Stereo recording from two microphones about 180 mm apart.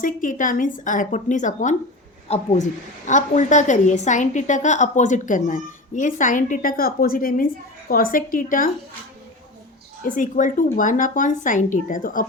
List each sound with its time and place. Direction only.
0.0 s a woman's voice: 45° left (ahead or behind)
10.0 s a woman's voice: 45° left (ahead or behind)